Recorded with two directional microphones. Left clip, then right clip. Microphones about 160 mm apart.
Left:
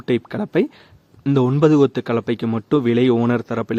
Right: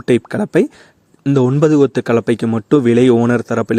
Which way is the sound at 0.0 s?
35° right (ahead or behind).